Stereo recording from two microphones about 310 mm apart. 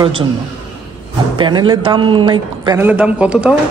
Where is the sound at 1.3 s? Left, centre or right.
Centre.